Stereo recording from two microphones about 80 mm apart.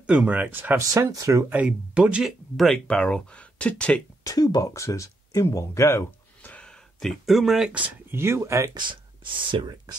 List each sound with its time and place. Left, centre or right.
0.0 s speech: centre
0.7 s speech: right
1.5 s speech: centre
2.2 s speech: centre
4.2 s speech: left
6.4 s a sound: centre
7.0 s speech: centre
8.1 s speech: right
9.5 s speech: right